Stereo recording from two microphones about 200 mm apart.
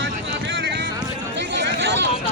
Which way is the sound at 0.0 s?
65° right (ahead or behind).